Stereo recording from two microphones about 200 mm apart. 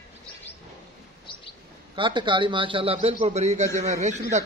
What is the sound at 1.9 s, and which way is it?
Speech, 25° right (ahead or behind).